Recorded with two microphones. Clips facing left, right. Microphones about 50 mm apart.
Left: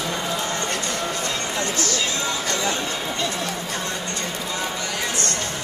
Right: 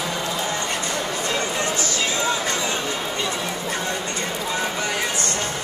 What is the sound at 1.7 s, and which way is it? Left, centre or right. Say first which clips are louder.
Music: right 1 dB; centre.